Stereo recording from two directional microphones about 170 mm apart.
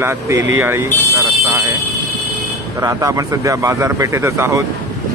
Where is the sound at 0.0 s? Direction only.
15° right (ahead or behind).